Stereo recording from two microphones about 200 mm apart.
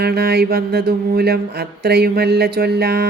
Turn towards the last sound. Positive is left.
turn(degrees=-55)  # may be behind; listen again after turning